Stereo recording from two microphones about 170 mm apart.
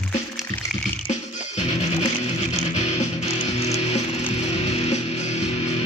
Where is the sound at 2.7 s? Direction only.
40° left (ahead or behind).